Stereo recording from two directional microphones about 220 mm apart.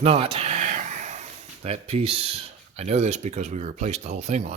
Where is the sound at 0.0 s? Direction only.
25° right (ahead or behind).